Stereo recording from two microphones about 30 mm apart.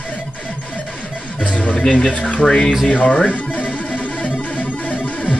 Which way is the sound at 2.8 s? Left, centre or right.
Left.